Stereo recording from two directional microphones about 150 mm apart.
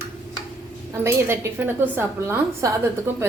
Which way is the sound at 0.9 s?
20° right (ahead or behind).